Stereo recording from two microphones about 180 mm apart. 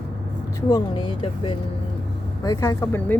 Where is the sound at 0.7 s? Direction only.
25° left (ahead or behind).